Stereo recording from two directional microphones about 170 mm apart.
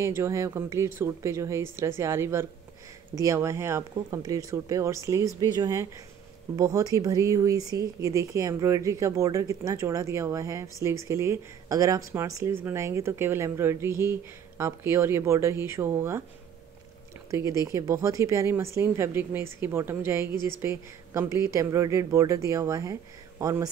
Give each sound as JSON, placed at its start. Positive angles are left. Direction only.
{"t": 0.0, "sound": "speech", "side_deg": -15}
{"t": 17.3, "sound": "speech", "side_deg": -20}